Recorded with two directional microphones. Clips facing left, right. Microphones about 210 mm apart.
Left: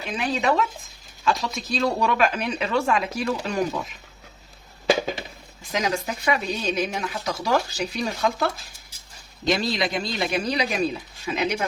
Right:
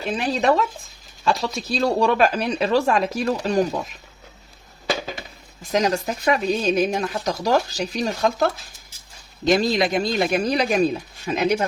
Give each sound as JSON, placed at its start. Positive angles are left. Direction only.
{"t": 0.0, "sound": "speech", "side_deg": -35}
{"t": 5.7, "sound": "speech", "side_deg": -40}
{"t": 9.5, "sound": "speech", "side_deg": -45}